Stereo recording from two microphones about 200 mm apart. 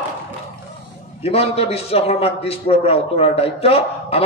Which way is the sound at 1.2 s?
30° left (ahead or behind).